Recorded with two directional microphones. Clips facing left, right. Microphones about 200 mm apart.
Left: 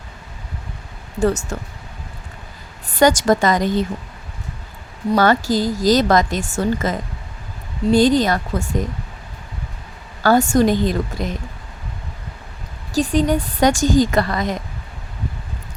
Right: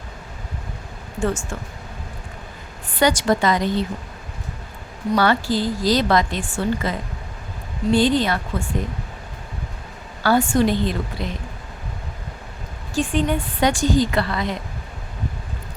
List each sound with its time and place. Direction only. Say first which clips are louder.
1.2 s a woman's voice: left 5 dB; 40° left (ahead or behind)
2.9 s a woman's voice: left 4 dB; 45° left (ahead or behind)
5.1 s a woman's voice: left 3 dB; 40° left (ahead or behind)
10.2 s a woman's voice: left 3 dB; 45° left (ahead or behind)
12.9 s a woman's voice: left 4 dB; 40° left (ahead or behind)